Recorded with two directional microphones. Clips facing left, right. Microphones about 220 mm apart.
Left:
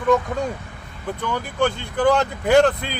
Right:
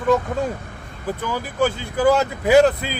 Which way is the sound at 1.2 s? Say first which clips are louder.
Even; 5° right (ahead or behind).